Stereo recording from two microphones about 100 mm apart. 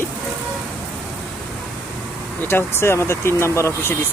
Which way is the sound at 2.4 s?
25° left (ahead or behind).